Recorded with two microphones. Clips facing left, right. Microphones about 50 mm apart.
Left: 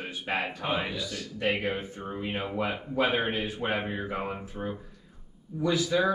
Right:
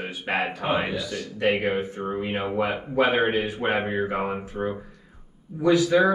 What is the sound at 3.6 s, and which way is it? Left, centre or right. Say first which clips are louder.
Speech: right 6 dB; right.